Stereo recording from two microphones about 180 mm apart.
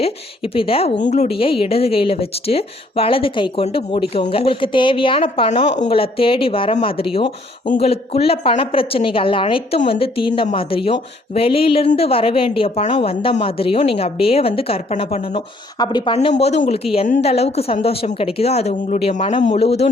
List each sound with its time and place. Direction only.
0.0 s a woman's voice: 30° left (ahead or behind)
16.1 s a woman's voice: 35° left (ahead or behind)